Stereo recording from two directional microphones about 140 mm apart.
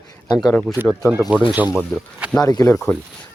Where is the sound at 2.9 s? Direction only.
15° left (ahead or behind).